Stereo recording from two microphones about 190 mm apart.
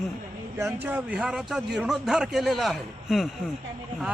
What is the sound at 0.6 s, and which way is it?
A man's voice, 10° right (ahead or behind).